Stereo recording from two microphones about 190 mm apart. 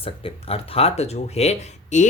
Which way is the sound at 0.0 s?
30° left (ahead or behind).